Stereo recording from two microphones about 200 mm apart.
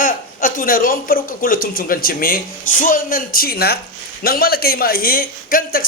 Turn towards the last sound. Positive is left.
turn(degrees=45)  # may be behind; listen again after turning